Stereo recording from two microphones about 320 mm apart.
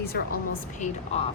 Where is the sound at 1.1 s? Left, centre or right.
Centre.